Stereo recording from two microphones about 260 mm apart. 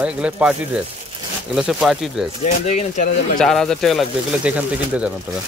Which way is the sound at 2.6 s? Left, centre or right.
Left.